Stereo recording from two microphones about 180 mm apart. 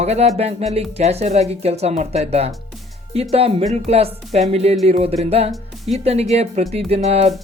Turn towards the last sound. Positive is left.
turn(degrees=-35)  # may be behind; listen again after turning